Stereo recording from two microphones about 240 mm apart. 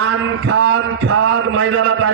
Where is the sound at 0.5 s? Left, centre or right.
Right.